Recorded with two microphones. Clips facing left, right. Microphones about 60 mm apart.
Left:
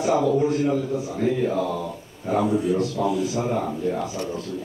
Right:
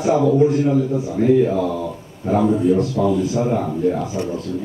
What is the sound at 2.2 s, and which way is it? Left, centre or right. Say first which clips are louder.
A man's voice: right 5 dB; centre.